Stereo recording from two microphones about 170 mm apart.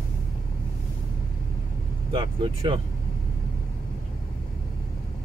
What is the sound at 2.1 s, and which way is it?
Speech, 30° right (ahead or behind).